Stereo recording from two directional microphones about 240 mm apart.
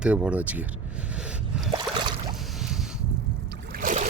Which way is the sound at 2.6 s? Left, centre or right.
Centre.